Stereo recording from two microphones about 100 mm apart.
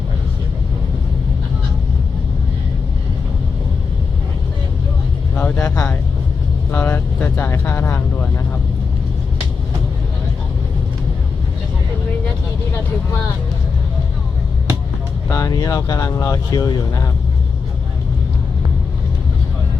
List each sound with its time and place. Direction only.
5.3 s vehicle: 15° left (ahead or behind)
5.7 s speech: 25° left (ahead or behind)
15.3 s speech: 35° left (ahead or behind)